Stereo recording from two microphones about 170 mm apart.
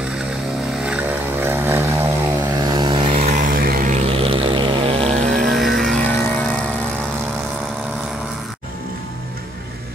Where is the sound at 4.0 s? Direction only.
35° right (ahead or behind).